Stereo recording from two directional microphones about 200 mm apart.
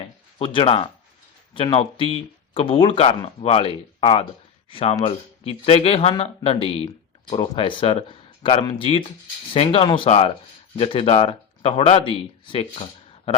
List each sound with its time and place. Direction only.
0.3 s speech: 25° left (ahead or behind)